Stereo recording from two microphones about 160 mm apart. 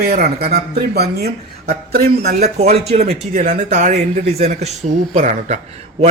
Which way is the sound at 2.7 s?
40° right (ahead or behind).